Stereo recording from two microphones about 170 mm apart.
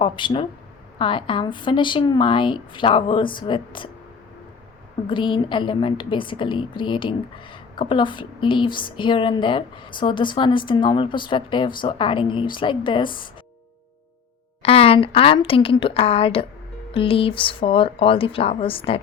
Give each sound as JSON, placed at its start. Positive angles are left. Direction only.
{"t": 0.0, "sound": "a woman's voice", "side_deg": 30}
{"t": 5.0, "sound": "a woman's voice", "side_deg": 30}
{"t": 14.6, "sound": "speech", "side_deg": 35}